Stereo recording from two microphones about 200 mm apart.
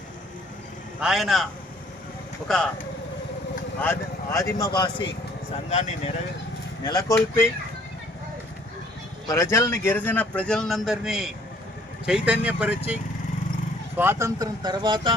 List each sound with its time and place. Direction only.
1.0 s a man's voice: centre (ahead or behind)
3.8 s speech: 15° left (ahead or behind)
5.7 s speech: 35° left (ahead or behind)
6.8 s speech: 20° left (ahead or behind)
9.2 s speech: 15° left (ahead or behind); by 15.1 s 25° right (ahead or behind)